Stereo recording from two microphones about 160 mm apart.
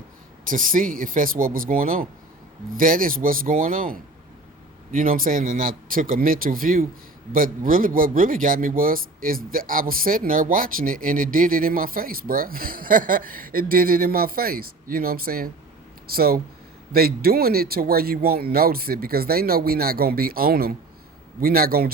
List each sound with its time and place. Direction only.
0.5 s speech: 60° right (ahead or behind)